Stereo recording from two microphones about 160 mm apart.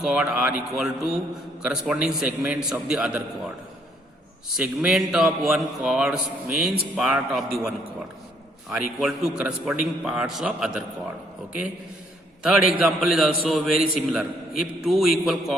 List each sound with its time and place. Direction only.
0.0 s a man's voice: 5° right (ahead or behind)
4.5 s a man's voice: 5° right (ahead or behind)
9.0 s a man's voice: 5° right (ahead or behind)
12.4 s a man's voice: 5° right (ahead or behind)